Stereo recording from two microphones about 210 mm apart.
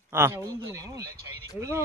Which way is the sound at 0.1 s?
10° right (ahead or behind).